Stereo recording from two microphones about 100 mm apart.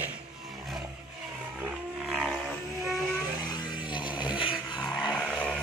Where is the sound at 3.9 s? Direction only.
50° left (ahead or behind).